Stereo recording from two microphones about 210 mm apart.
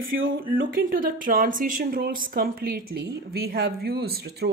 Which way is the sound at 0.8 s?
45° right (ahead or behind).